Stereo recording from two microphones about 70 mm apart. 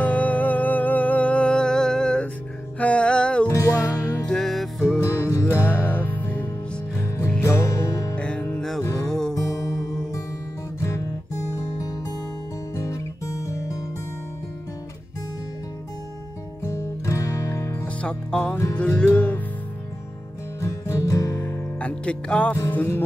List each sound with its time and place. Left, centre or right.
0.0 s music: left
3.4 s music: left
4.3 s music: centre
5.0 s music: left
5.5 s music: left
7.4 s music: left
8.2 s music: centre
8.5 s music: centre
9.3 s music: left
12.7 s music: left
16.6 s music: left
17.8 s music: centre
20.6 s music: left
21.7 s music: centre